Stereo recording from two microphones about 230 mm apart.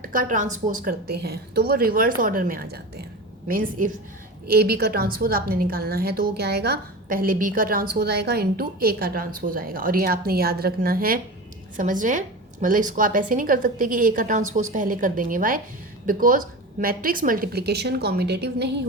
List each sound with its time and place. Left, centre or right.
0.0 s a woman's voice: right